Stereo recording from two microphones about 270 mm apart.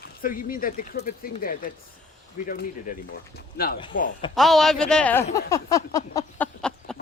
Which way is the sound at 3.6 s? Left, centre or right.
Left.